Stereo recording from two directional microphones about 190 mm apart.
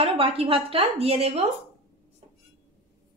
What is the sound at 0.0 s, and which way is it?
A woman's voice, 30° right (ahead or behind).